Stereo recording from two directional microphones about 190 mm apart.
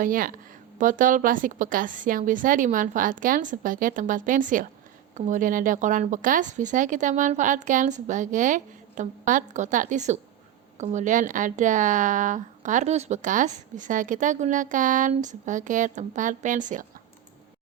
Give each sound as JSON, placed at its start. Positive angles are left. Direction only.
{"t": 0.0, "sound": "speech", "side_deg": -45}